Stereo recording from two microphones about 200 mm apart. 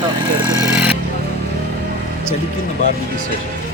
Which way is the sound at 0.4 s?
15° right (ahead or behind).